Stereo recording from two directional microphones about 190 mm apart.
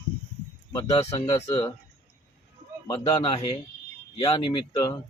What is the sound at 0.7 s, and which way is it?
Speech, 20° left (ahead or behind).